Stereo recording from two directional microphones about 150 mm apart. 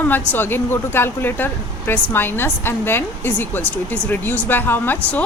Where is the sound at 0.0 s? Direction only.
15° left (ahead or behind).